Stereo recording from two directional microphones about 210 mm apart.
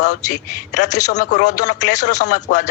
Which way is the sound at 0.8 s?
35° left (ahead or behind).